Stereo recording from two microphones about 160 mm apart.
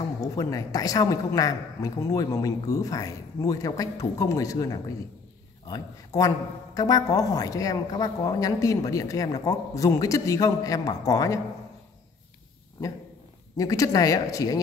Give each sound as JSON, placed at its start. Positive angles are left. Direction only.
{"t": 0.0, "sound": "a woman's voice", "side_deg": 25}
{"t": 13.6, "sound": "a woman's voice", "side_deg": 20}